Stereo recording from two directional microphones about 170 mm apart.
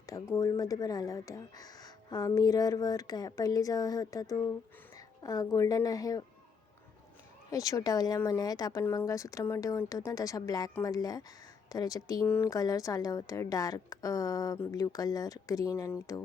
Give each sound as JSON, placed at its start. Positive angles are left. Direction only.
{"t": 0.3, "sound": "a woman's voice", "side_deg": 20}
{"t": 7.5, "sound": "a woman's voice", "side_deg": 20}